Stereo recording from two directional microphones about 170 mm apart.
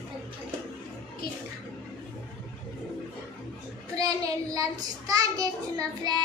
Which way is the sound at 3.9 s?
20° right (ahead or behind).